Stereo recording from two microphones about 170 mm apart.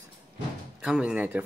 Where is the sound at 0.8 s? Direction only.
5° right (ahead or behind).